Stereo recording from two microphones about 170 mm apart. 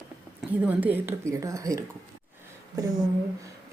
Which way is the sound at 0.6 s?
10° right (ahead or behind).